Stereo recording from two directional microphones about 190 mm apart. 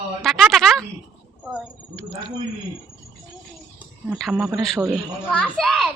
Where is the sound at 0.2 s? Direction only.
Centre (ahead or behind).